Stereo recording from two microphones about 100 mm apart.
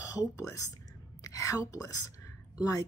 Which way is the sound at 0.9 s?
35° left (ahead or behind).